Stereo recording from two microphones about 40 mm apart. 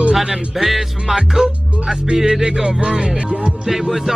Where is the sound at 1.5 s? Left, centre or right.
Right.